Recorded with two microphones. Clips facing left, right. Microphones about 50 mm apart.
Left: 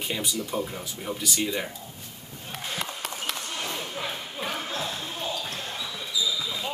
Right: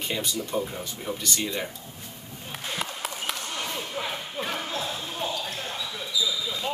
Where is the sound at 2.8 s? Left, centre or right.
Centre.